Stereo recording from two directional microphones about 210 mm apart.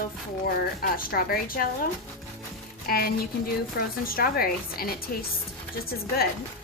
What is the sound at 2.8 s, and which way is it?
Speech, 45° left (ahead or behind).